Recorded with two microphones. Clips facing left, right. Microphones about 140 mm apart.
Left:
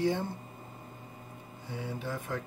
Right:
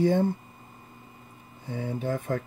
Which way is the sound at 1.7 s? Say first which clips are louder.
Right 7 dB; 50° right (ahead or behind).